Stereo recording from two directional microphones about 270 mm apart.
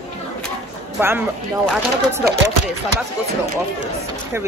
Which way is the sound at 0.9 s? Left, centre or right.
Centre.